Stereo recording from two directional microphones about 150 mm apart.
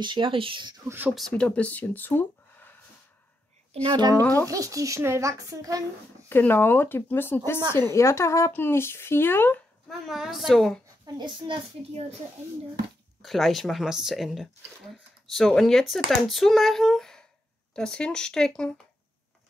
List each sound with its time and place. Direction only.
0.0 s a child's voice: 35° right (ahead or behind)
0.8 s speech: 15° right (ahead or behind)
1.1 s speech: 5° left (ahead or behind)
3.7 s a child's voice: 35° right (ahead or behind)
4.2 s speech: 15° left (ahead or behind)
4.5 s speech: 20° right (ahead or behind)
6.2 s speech: 15° left (ahead or behind)
9.8 s speech: centre (ahead or behind)
11.1 s a child's voice: 30° right (ahead or behind)
13.2 s speech: centre (ahead or behind)